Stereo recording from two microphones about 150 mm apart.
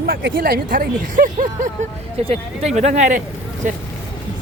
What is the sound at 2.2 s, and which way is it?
Speech, 40° right (ahead or behind).